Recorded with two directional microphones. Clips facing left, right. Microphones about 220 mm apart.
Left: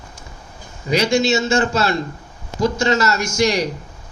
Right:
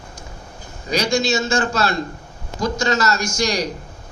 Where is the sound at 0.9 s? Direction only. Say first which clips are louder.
Left 3 dB; 25° left (ahead or behind).